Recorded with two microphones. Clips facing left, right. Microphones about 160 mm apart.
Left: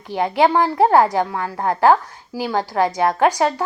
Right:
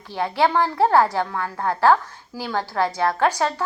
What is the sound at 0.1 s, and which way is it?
A woman's voice, 15° left (ahead or behind).